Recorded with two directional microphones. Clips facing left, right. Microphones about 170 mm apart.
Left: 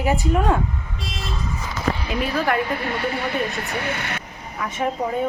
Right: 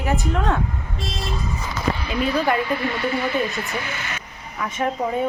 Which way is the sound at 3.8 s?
65° left (ahead or behind).